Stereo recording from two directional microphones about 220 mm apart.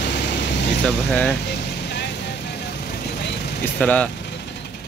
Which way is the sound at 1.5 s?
50° left (ahead or behind).